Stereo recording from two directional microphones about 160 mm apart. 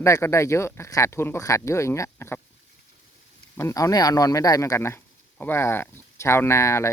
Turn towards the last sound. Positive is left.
turn(degrees=20)  # may be behind; listen again after turning